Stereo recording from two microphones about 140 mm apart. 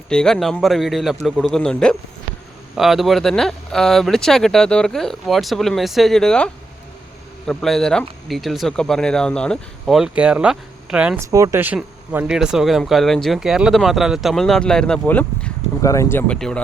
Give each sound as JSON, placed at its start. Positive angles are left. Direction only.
{"t": 0.1, "sound": "speech", "side_deg": 5}
{"t": 11.2, "sound": "speech", "side_deg": -25}
{"t": 12.3, "sound": "speech", "side_deg": -5}
{"t": 15.8, "sound": "speech", "side_deg": 20}